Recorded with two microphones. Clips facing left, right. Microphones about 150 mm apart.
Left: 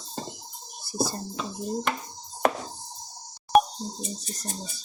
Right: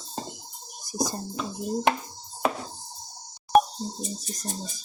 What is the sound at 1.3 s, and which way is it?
Dishes, 5° right (ahead or behind).